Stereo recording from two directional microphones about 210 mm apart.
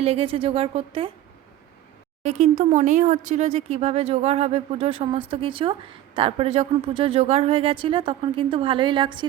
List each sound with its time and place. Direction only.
0.0 s speech: 30° right (ahead or behind)
2.2 s speech: 35° right (ahead or behind)